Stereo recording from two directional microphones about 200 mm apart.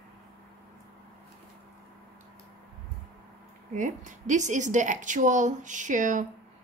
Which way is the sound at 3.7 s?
40° right (ahead or behind).